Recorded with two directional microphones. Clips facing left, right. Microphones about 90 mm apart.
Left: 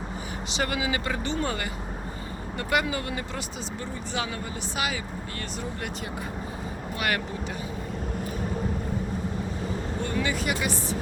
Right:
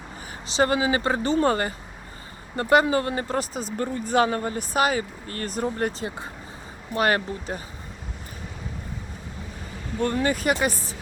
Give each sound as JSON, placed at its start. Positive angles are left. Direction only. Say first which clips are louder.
{"t": 0.5, "sound": "speech", "louder": "right 7 dB", "side_deg": -35}
{"t": 10.0, "sound": "speech", "louder": "right 7 dB", "side_deg": -45}